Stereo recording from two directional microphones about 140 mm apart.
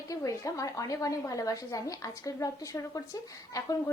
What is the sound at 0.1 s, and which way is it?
A woman's voice, 25° left (ahead or behind).